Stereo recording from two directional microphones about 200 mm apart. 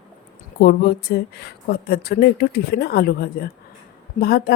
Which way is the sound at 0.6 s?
50° left (ahead or behind).